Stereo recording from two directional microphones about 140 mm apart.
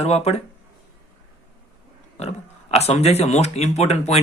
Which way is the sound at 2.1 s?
50° left (ahead or behind).